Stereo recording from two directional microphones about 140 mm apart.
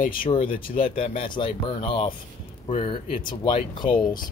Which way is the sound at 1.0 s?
40° left (ahead or behind).